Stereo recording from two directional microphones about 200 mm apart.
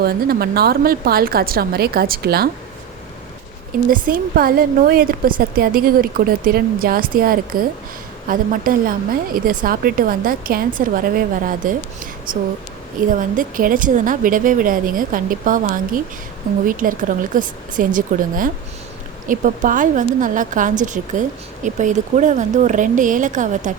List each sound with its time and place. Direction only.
0.0 s a woman's voice: 50° right (ahead or behind)
3.9 s a woman's voice: 45° right (ahead or behind)